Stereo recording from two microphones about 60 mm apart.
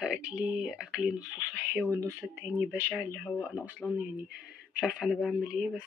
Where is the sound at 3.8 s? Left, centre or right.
Left.